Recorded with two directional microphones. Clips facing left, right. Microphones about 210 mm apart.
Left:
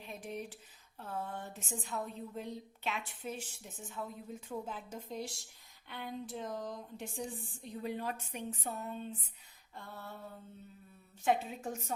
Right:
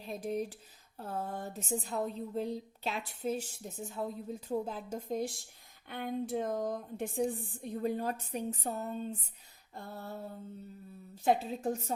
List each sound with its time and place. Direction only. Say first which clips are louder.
0.0 s a woman's voice: right 7 dB; 40° right (ahead or behind)